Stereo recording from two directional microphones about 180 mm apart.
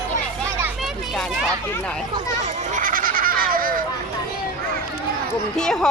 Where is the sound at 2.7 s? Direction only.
50° right (ahead or behind).